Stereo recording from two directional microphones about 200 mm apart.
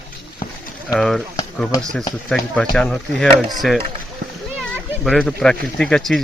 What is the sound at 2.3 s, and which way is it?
Speech, centre (ahead or behind).